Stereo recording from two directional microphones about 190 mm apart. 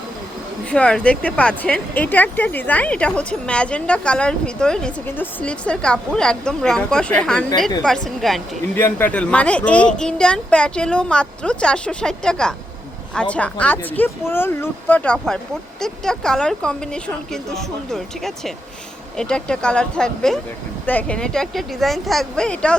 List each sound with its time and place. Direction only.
0.6 s speech: 5° left (ahead or behind)